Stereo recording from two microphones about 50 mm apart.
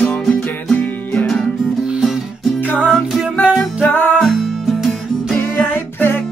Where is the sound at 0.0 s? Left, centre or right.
Centre.